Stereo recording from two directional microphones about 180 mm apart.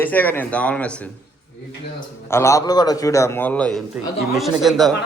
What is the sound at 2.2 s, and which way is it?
A man's voice, 15° left (ahead or behind).